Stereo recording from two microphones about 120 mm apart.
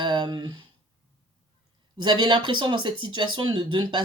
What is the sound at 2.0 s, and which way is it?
Speech, 40° right (ahead or behind).